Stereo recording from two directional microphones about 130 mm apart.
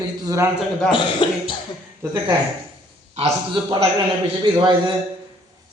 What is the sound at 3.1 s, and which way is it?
Speech, 50° right (ahead or behind).